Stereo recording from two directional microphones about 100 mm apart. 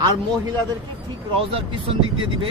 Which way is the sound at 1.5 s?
60° right (ahead or behind).